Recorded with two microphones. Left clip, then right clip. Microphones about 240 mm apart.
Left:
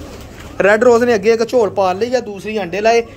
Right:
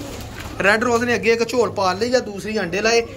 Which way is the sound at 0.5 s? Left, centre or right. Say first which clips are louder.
Left 7 dB; centre.